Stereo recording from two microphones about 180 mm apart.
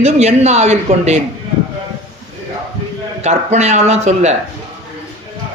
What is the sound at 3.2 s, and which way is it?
Speech, 40° right (ahead or behind).